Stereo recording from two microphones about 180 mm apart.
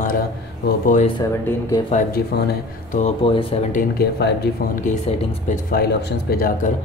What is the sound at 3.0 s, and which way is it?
Speech, 30° left (ahead or behind).